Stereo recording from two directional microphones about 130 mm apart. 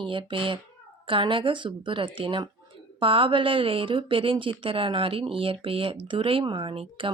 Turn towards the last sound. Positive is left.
turn(degrees=-45)  # may be behind; listen again after turning